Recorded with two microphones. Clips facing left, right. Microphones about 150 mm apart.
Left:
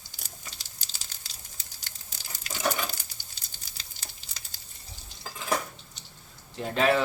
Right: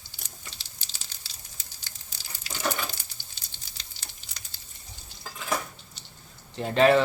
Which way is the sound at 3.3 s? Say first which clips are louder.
Even; 35° left (ahead or behind).